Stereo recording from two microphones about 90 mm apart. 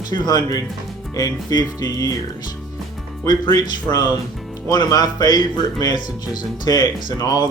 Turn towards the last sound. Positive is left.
turn(degrees=50)  # may be behind; listen again after turning